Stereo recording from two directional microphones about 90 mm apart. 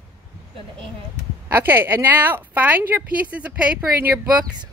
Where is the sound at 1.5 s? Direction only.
25° right (ahead or behind).